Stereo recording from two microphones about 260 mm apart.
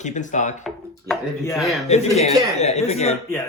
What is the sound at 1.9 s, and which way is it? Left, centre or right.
Speech, left.